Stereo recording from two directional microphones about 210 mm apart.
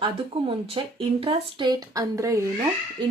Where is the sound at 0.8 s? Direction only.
25° right (ahead or behind).